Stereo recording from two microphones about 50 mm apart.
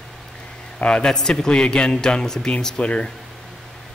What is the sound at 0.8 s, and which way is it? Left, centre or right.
A man's voice, centre.